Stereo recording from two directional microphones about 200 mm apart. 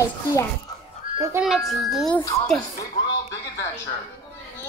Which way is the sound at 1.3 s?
5° right (ahead or behind).